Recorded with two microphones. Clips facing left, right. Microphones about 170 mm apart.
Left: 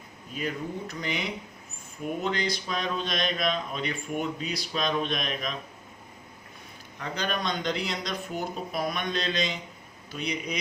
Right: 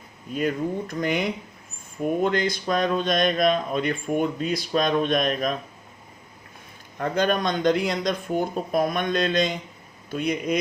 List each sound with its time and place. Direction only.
0.3 s a man's voice: 50° right (ahead or behind)
7.0 s a man's voice: 50° right (ahead or behind)